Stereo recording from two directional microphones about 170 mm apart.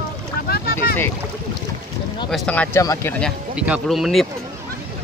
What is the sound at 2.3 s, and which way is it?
Speech, 10° left (ahead or behind).